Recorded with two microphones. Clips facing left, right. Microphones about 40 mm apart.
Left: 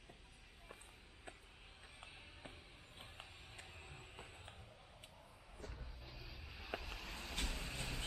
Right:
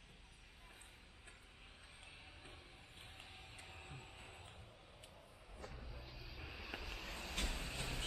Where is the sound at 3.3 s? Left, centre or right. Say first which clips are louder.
Right 1 dB; right.